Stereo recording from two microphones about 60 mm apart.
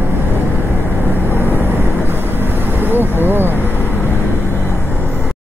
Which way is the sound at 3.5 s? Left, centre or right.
Left.